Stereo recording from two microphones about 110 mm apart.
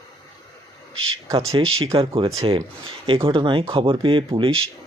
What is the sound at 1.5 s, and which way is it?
Speech, 55° right (ahead or behind).